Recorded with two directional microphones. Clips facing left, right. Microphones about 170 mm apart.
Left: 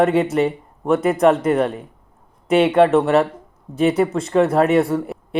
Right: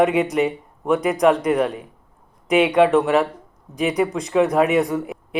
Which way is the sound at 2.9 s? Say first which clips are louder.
Left 2 dB; 5° right (ahead or behind).